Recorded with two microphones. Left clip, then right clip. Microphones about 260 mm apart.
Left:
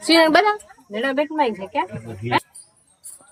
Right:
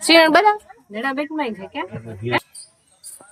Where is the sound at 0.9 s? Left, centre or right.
Centre.